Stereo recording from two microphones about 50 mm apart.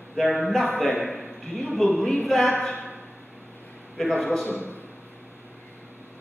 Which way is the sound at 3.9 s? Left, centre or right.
Centre.